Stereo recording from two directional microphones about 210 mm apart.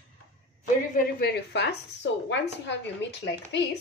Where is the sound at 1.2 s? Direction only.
50° left (ahead or behind).